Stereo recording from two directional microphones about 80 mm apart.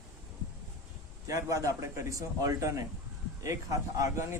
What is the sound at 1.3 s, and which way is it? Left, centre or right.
A man's voice, right.